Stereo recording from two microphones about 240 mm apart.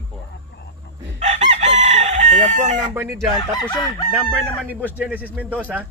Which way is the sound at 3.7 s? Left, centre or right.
Centre.